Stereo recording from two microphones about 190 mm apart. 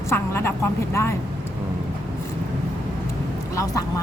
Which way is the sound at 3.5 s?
20° left (ahead or behind).